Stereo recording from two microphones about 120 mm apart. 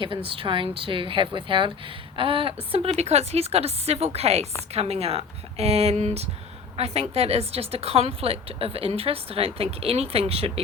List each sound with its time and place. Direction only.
0.0 s speech: 45° right (ahead or behind)
2.7 s a woman's voice: 60° right (ahead or behind)